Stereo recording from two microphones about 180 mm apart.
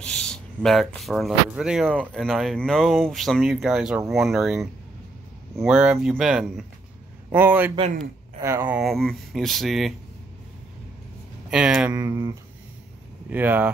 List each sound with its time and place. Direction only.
0.0 s a man's voice: 5° left (ahead or behind)
11.5 s speech: 5° right (ahead or behind)